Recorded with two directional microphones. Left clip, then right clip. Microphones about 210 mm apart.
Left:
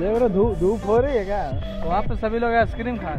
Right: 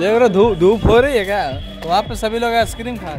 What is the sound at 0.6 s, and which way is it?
Speech, 50° right (ahead or behind).